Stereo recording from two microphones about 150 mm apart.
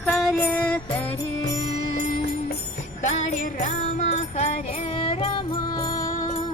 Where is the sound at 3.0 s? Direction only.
60° left (ahead or behind); by 6.1 s 25° left (ahead or behind).